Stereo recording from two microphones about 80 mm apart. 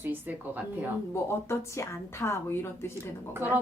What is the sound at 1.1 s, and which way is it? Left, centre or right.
A woman's voice, left.